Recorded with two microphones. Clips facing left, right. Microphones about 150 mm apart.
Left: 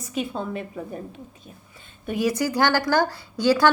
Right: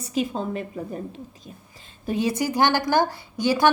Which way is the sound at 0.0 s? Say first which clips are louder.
Right 2 dB; 35° right (ahead or behind).